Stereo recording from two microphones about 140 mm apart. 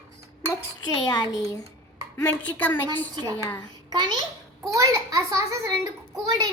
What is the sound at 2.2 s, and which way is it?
Speech, 10° left (ahead or behind).